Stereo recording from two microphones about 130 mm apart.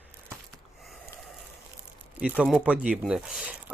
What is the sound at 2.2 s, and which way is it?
Speech, 10° right (ahead or behind).